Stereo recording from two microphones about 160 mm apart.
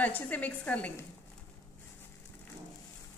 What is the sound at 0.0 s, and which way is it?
A woman's voice, 10° left (ahead or behind).